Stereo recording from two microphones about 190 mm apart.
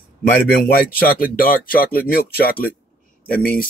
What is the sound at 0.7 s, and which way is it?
Speech, 50° left (ahead or behind).